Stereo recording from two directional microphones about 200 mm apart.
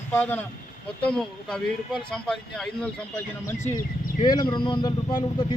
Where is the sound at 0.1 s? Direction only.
10° left (ahead or behind).